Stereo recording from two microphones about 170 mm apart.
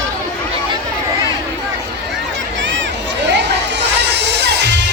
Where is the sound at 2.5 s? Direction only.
90° right.